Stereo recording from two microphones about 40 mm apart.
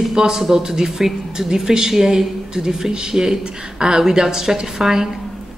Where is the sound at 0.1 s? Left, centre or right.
Centre.